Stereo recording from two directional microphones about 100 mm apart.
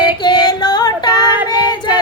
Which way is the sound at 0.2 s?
45° left (ahead or behind).